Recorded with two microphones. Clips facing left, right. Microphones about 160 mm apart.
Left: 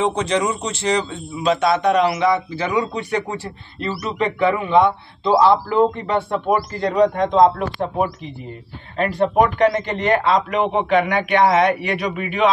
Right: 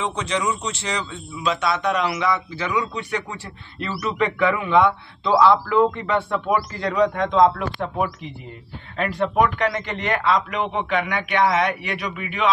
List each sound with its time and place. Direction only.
0.0 s a man's voice: 40° left (ahead or behind)
8.9 s a man's voice: 35° left (ahead or behind)